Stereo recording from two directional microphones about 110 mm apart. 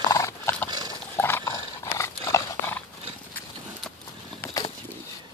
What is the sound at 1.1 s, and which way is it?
Dog, 20° left (ahead or behind).